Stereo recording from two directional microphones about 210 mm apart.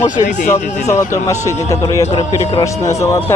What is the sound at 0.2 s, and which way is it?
Speech, 35° left (ahead or behind).